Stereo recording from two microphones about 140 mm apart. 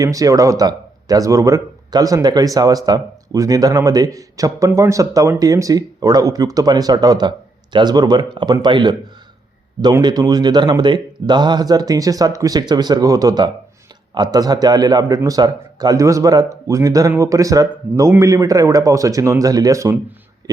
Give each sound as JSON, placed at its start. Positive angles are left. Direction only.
{"t": 0.0, "sound": "speech", "side_deg": -25}
{"t": 10.0, "sound": "speech", "side_deg": -30}